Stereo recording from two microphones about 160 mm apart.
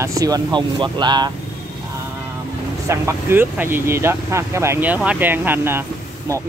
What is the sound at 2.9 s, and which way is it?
Speech, 15° right (ahead or behind).